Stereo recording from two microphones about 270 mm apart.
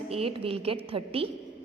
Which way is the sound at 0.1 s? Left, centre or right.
Right.